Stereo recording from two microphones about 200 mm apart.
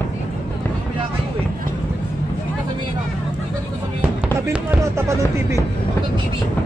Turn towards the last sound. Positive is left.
turn(degrees=-15)  # may be behind; listen again after turning